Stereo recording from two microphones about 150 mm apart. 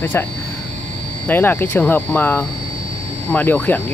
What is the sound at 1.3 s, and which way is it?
Speech, 15° left (ahead or behind).